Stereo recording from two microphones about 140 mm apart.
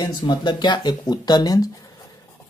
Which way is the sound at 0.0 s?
30° left (ahead or behind).